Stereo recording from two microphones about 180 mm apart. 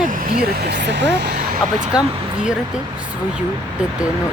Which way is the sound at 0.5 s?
65° right (ahead or behind).